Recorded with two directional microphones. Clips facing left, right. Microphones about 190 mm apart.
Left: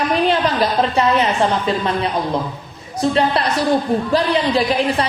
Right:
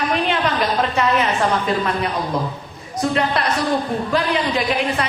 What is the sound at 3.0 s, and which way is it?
A man's voice, 30° left (ahead or behind).